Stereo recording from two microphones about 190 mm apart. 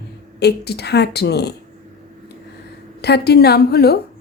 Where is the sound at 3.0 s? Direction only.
60° left (ahead or behind).